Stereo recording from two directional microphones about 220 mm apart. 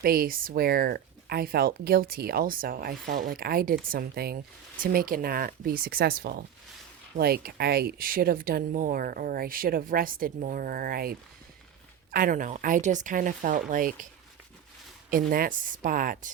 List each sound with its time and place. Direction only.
0.0 s speech: 45° right (ahead or behind)
15.1 s speech: 40° right (ahead or behind)